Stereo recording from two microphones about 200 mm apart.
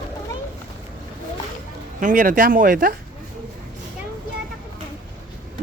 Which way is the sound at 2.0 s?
40° right (ahead or behind).